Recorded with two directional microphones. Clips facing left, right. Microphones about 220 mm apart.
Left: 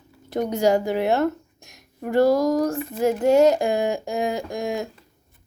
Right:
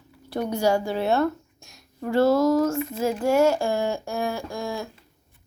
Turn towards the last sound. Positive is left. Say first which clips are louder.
# left 4 dB
turn(degrees=20)  # may be behind; listen again after turning